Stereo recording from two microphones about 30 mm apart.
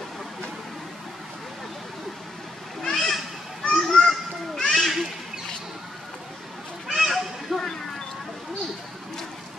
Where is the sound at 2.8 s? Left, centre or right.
Centre.